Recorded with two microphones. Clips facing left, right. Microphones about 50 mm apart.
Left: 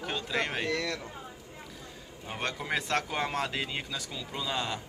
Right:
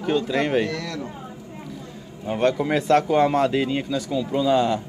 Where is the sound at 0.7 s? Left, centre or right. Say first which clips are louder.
Right 2 dB; left.